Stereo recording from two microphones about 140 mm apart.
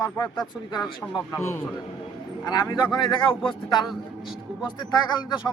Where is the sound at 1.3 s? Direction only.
20° left (ahead or behind).